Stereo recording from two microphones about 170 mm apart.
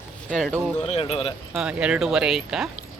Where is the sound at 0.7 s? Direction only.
35° left (ahead or behind).